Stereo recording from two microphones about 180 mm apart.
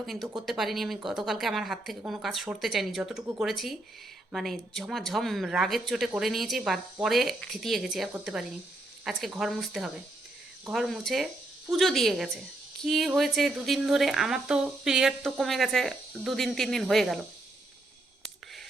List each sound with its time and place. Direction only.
0.0 s a woman's voice: centre (ahead or behind)